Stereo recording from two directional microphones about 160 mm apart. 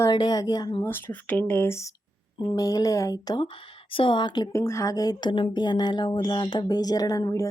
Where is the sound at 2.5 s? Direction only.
25° left (ahead or behind).